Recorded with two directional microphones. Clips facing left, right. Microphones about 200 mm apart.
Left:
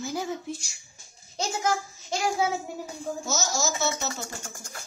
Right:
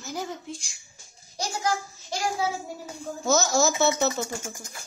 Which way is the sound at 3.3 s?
55° right (ahead or behind).